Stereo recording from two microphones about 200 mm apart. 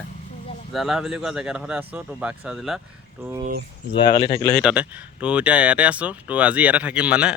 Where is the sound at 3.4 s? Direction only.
50° right (ahead or behind).